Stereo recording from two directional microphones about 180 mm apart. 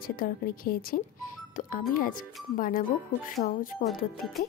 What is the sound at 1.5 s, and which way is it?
Music, 50° left (ahead or behind).